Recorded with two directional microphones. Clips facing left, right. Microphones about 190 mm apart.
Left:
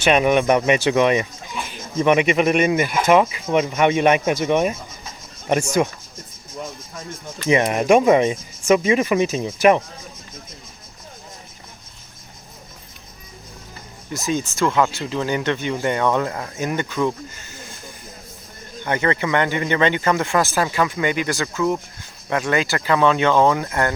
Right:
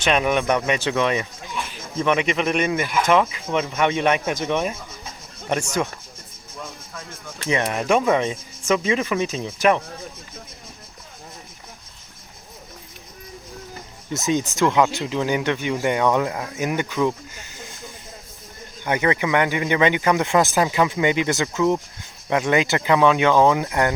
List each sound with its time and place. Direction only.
0.0 s speech: 5° left (ahead or behind)
7.4 s speech: 15° left (ahead or behind)
14.1 s speech: 20° right (ahead or behind)
18.9 s speech: 10° right (ahead or behind)